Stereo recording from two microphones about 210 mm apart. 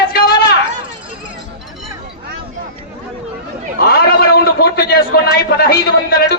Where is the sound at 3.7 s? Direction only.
45° left (ahead or behind).